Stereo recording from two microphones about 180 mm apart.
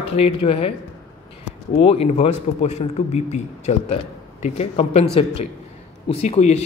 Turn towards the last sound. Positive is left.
turn(degrees=35)  # may be behind; listen again after turning